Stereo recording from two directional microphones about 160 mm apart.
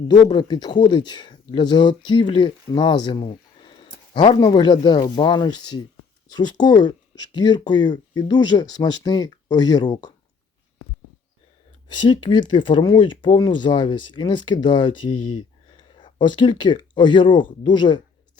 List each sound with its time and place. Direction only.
0.1 s speech: 25° left (ahead or behind)
11.9 s speech: 30° left (ahead or behind)